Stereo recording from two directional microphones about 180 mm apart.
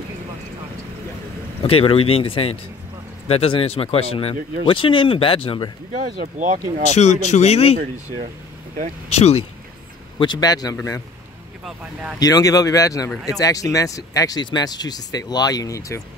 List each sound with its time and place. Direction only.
1.6 s speech: 30° left (ahead or behind)
5.9 s speech: 45° right (ahead or behind)
7.0 s speech: 40° left (ahead or behind)
9.1 s speech: 35° left (ahead or behind)
10.1 s speech: 25° left (ahead or behind)
11.6 s speech: 5° right (ahead or behind)
12.2 s speech: 20° left (ahead or behind)